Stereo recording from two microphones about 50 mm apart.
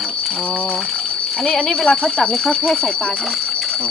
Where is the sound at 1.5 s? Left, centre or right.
Centre.